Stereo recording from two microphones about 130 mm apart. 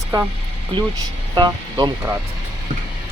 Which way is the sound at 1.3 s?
35° right (ahead or behind).